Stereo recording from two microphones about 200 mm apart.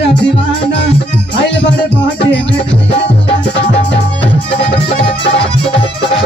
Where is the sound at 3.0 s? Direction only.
60° left (ahead or behind).